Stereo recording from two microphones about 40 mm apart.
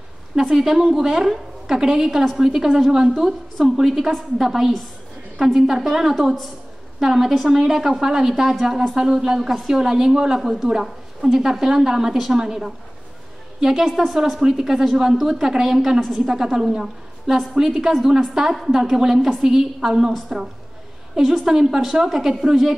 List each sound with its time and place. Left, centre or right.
0.4 s a woman's voice: centre